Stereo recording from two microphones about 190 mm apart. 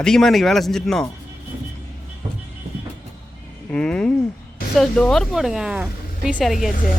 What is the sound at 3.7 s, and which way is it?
Speech, 5° left (ahead or behind).